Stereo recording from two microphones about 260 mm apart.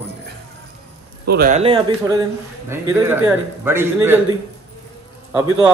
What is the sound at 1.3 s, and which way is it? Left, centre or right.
Speech, right.